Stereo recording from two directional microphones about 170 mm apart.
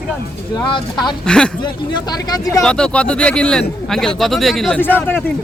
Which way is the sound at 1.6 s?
25° left (ahead or behind).